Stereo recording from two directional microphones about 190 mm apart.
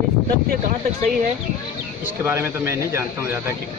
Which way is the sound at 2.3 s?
15° right (ahead or behind).